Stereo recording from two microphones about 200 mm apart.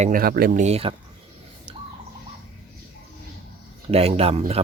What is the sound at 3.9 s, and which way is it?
Speech, 30° right (ahead or behind).